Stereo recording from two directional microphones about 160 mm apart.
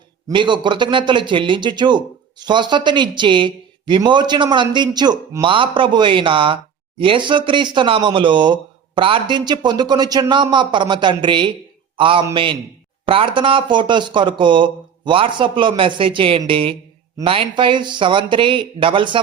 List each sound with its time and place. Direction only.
0.3 s a man's voice: 30° right (ahead or behind)